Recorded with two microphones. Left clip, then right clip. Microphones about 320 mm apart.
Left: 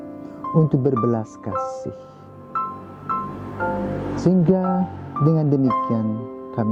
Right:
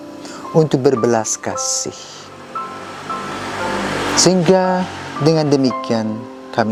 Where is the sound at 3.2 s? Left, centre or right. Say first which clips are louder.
Right 4 dB; centre.